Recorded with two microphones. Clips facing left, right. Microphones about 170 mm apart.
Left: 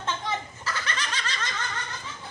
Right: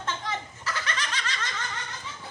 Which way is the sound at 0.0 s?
30° left (ahead or behind).